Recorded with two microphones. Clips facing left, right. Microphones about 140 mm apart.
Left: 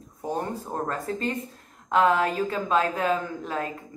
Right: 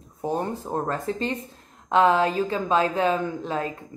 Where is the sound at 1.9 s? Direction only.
25° right (ahead or behind).